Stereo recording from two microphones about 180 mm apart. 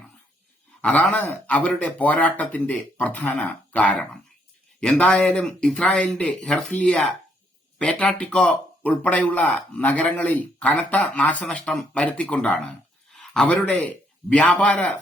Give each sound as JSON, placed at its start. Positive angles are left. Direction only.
{"t": 0.8, "sound": "speech", "side_deg": 5}
{"t": 13.1, "sound": "a sound", "side_deg": 0}
{"t": 14.3, "sound": "speech", "side_deg": 5}